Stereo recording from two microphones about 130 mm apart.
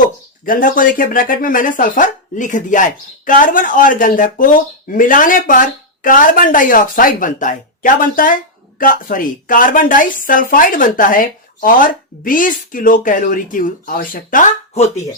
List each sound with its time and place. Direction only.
0.4 s speech: 90° left